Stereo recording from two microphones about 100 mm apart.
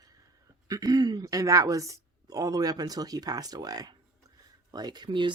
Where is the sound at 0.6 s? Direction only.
40° right (ahead or behind).